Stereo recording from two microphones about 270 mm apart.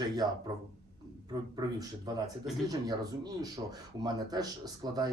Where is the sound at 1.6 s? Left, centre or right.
Centre.